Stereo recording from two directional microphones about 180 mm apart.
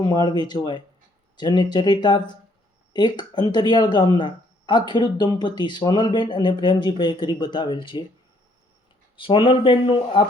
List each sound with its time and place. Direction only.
0.0 s speech: 20° left (ahead or behind)
9.1 s speech: 30° left (ahead or behind)